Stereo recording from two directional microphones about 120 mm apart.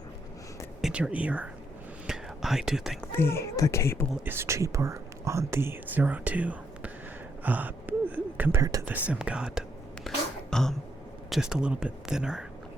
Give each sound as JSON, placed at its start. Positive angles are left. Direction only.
{"t": 0.8, "sound": "speech", "side_deg": -5}
{"t": 2.0, "sound": "whispering", "side_deg": -5}
{"t": 3.1, "sound": "speech", "side_deg": 20}
{"t": 4.3, "sound": "speech", "side_deg": -20}
{"t": 7.4, "sound": "gasp", "side_deg": -15}
{"t": 8.9, "sound": "speech", "side_deg": -10}
{"t": 10.5, "sound": "throat clearing", "side_deg": 5}
{"t": 11.3, "sound": "speech", "side_deg": -5}